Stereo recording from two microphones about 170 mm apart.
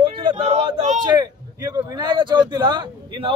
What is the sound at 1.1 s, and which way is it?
Speech, 25° right (ahead or behind).